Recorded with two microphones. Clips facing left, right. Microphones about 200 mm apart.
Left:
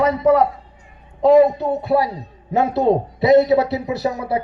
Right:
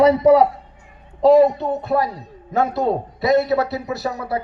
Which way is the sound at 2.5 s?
20° left (ahead or behind).